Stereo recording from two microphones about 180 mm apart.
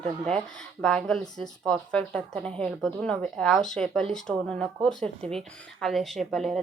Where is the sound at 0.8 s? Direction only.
5° left (ahead or behind).